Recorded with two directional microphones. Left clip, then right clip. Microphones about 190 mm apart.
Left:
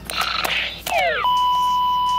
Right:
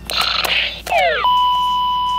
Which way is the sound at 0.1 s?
15° right (ahead or behind).